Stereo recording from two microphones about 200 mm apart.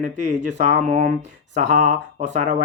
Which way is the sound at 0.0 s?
35° right (ahead or behind).